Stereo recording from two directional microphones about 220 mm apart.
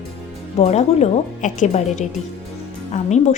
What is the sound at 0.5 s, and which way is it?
Speech, 30° left (ahead or behind).